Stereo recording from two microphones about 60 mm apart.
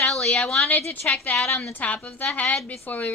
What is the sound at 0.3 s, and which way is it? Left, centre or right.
A woman's voice, centre.